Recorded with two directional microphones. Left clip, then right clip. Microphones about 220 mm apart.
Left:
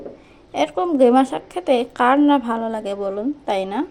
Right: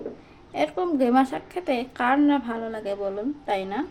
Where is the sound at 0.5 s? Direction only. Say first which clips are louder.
Left 5 dB; 25° left (ahead or behind).